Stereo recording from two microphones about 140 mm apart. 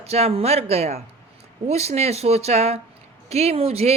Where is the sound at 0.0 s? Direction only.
45° right (ahead or behind).